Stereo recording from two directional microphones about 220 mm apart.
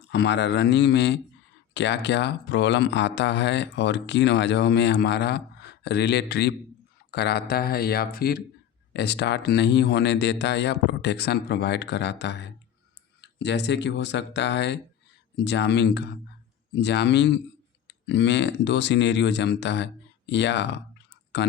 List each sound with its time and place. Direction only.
0.1 s speech: 50° left (ahead or behind)